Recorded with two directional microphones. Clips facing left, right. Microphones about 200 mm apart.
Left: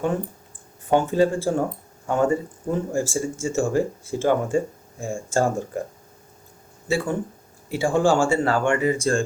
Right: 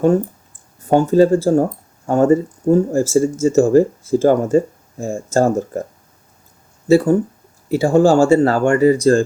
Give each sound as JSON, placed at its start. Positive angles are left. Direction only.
{"t": 0.9, "sound": "speech", "side_deg": -40}
{"t": 6.8, "sound": "speech", "side_deg": -40}